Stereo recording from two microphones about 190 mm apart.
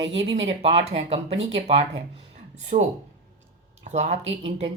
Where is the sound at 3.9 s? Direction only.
35° right (ahead or behind).